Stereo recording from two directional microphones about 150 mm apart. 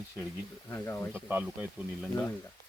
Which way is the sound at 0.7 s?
15° left (ahead or behind).